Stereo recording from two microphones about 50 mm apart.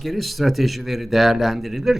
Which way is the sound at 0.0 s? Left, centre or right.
Centre.